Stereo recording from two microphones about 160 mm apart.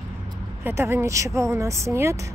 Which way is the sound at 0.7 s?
15° right (ahead or behind).